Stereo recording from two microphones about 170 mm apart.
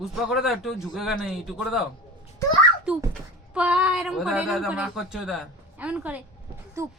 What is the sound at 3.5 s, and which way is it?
A child's voice, 5° right (ahead or behind).